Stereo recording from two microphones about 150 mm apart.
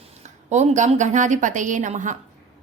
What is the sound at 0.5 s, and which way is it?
A woman's voice, 50° right (ahead or behind).